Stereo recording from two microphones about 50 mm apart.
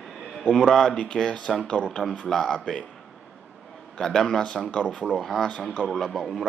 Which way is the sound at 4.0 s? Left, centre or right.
Centre.